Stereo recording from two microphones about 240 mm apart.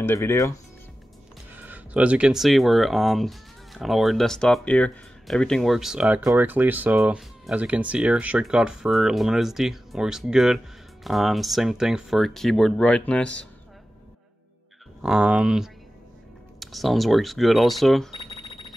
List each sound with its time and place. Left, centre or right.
0.0 s speech: centre
1.5 s speech: centre
15.0 s speech: centre
18.2 s a sound: centre